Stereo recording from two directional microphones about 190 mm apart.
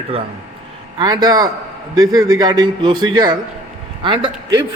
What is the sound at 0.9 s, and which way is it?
A man's voice, 20° right (ahead or behind).